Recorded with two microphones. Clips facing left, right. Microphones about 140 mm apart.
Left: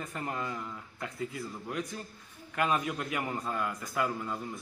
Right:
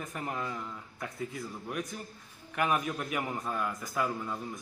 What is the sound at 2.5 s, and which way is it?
Speech, 15° right (ahead or behind).